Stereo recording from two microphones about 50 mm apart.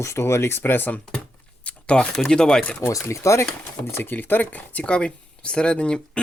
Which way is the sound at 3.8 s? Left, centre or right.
Left.